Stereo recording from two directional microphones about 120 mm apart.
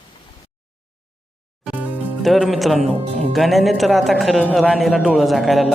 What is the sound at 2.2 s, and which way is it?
Speech, centre (ahead or behind).